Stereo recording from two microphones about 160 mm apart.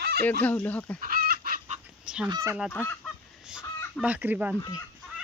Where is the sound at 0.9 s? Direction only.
60° right (ahead or behind).